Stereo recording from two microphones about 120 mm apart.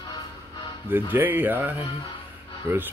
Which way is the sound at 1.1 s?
15° right (ahead or behind).